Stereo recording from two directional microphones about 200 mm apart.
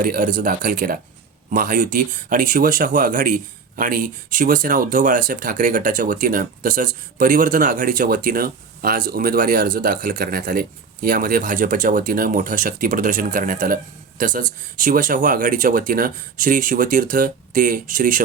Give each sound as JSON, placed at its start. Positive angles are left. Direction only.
{"t": 0.0, "sound": "speech", "side_deg": -45}